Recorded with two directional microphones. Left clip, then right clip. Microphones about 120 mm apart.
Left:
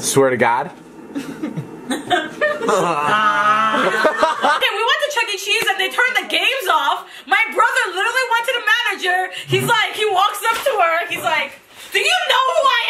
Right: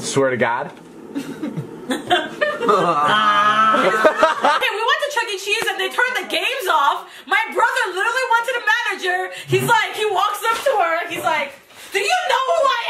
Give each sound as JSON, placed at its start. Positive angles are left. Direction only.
{"t": 0.1, "sound": "speech", "side_deg": 25}
{"t": 2.6, "sound": "speech", "side_deg": 20}
{"t": 3.1, "sound": "music", "side_deg": -15}
{"t": 3.7, "sound": "a woman's voice", "side_deg": 0}